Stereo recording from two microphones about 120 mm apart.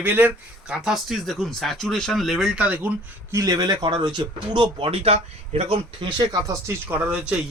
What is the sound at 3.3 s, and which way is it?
Speech, 30° right (ahead or behind).